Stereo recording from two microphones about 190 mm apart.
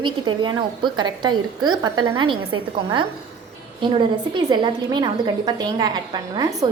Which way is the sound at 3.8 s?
25° right (ahead or behind).